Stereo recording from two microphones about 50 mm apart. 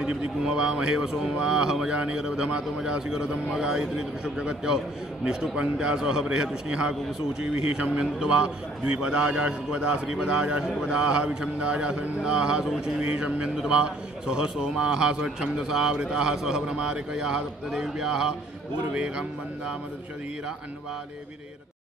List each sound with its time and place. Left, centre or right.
0.0 s a man's voice: centre